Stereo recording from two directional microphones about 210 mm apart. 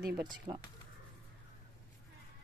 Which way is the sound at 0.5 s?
25° right (ahead or behind).